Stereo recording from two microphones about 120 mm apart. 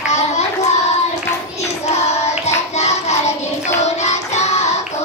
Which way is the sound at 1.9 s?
65° left (ahead or behind).